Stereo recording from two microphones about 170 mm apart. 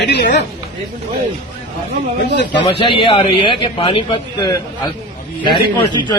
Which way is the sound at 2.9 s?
30° left (ahead or behind).